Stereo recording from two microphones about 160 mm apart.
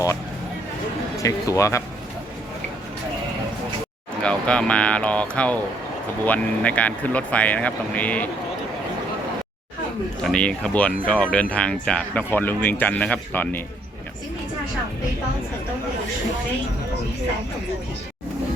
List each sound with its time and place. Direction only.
1.2 s speech: 20° left (ahead or behind)
4.2 s speech: 5° left (ahead or behind)
10.2 s speech: 5° left (ahead or behind)